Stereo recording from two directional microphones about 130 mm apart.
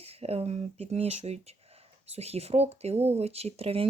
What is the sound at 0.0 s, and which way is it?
Speech, 50° right (ahead or behind).